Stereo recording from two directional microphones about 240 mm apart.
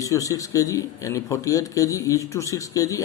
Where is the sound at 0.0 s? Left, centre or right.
Centre.